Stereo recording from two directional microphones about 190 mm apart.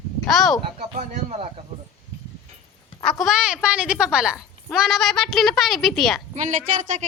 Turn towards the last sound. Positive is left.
turn(degrees=-40)  # may be behind; listen again after turning